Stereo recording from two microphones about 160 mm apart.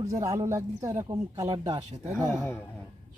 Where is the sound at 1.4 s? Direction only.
45° right (ahead or behind).